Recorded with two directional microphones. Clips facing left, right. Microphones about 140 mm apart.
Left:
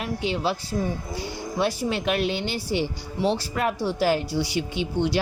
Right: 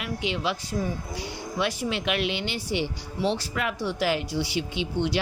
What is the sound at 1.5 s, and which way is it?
Speech, 35° left (ahead or behind).